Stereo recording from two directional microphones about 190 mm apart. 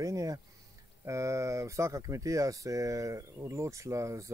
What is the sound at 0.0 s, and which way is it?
Speech, 20° right (ahead or behind).